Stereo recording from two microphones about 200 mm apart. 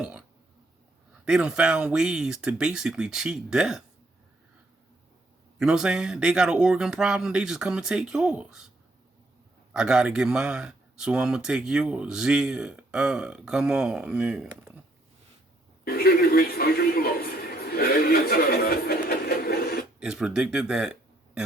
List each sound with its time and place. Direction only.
0.0 s burping: 5° right (ahead or behind)
1.2 s speech: 5° right (ahead or behind)
5.5 s speech: 5° right (ahead or behind)
9.7 s speech: 5° right (ahead or behind)
15.8 s a sound: 50° left (ahead or behind)
20.0 s speech: 5° right (ahead or behind)